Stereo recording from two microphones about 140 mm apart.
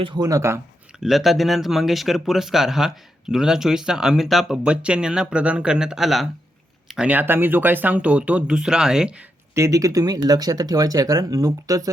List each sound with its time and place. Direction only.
0.0 s speech: 30° right (ahead or behind)
0.9 s speech: centre (ahead or behind)
9.6 s speech: 25° right (ahead or behind)